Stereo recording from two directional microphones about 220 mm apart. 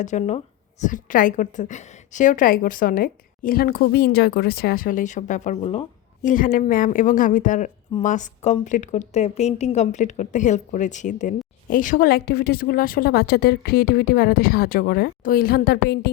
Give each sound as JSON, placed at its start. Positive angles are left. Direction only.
{"t": 0.0, "sound": "a woman's voice", "side_deg": 35}